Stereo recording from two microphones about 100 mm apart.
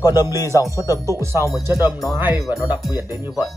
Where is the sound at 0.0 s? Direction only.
40° left (ahead or behind).